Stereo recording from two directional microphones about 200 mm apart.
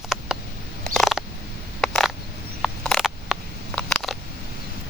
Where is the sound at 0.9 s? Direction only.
Centre (ahead or behind).